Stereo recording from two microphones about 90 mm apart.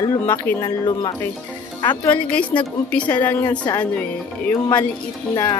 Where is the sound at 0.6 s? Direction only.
50° left (ahead or behind).